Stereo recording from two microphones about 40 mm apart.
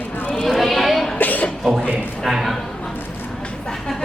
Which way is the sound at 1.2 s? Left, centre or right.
Left.